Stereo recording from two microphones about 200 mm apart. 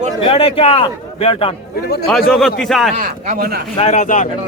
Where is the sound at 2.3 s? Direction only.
Centre (ahead or behind).